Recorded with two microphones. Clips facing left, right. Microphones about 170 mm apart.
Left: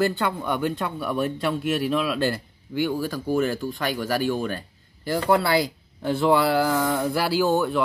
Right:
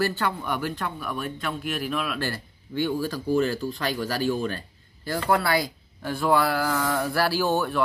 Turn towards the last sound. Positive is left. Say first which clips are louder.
# left 3 dB
turn(degrees=15)  # may be behind; listen again after turning